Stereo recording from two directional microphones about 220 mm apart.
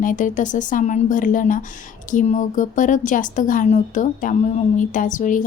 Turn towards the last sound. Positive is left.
turn(degrees=35)  # may be behind; listen again after turning